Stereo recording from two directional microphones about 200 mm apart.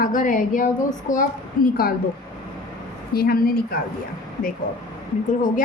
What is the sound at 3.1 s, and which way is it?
Speech, 50° left (ahead or behind).